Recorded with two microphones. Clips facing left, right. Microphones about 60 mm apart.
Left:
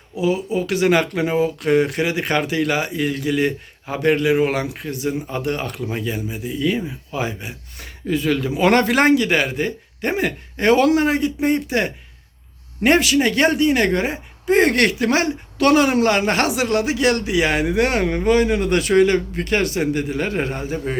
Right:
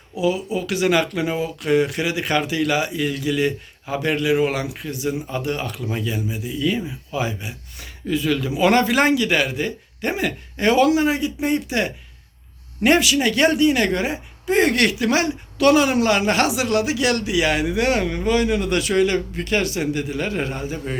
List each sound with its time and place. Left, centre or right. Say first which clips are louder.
0.2 s a woman's voice: left 1 dB; left